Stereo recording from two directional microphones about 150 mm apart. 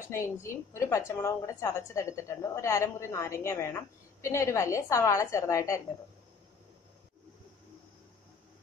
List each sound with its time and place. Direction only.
0.1 s a woman's voice: 20° left (ahead or behind)